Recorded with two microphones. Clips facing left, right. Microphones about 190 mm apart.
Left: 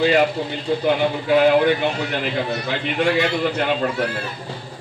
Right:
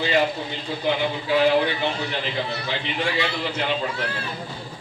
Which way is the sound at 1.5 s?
55° left (ahead or behind).